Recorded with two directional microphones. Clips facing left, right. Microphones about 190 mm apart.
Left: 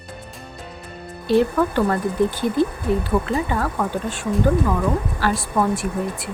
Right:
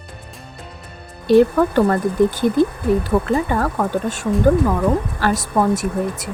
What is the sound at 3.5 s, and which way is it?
A woman's voice, 45° right (ahead or behind).